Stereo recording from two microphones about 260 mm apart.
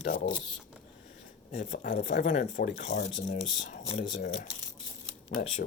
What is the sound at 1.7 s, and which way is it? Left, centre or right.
Speech, left.